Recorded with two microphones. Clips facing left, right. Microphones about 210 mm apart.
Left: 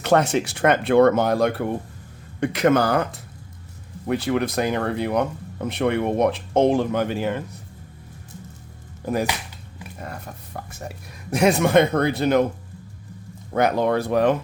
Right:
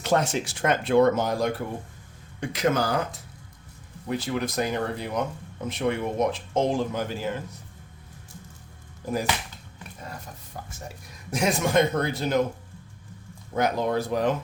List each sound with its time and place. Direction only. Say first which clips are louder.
0.0 s speech: left 5 dB; 65° left (ahead or behind)
10.1 s speech: left 3 dB; 60° left (ahead or behind)
13.5 s speech: left 5 dB; 65° left (ahead or behind)